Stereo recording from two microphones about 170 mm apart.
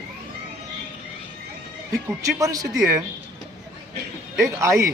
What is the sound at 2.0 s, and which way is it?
Speech, 20° right (ahead or behind).